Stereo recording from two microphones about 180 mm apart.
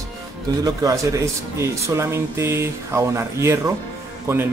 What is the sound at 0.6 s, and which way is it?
Speech, 20° right (ahead or behind).